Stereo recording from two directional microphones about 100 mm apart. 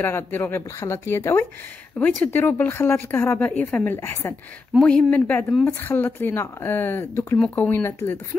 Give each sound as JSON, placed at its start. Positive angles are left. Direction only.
{"t": 0.0, "sound": "speech", "side_deg": 20}